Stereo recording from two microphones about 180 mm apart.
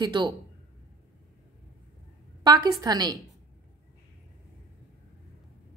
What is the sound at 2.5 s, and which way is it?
Speech, 20° right (ahead or behind).